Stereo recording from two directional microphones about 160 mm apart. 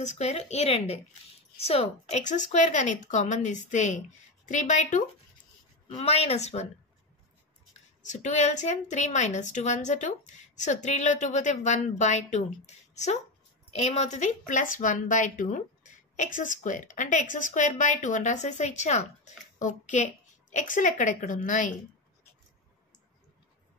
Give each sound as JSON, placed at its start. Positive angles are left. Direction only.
{"t": 0.0, "sound": "speech", "side_deg": 45}
{"t": 5.9, "sound": "speech", "side_deg": 40}
{"t": 8.0, "sound": "speech", "side_deg": 50}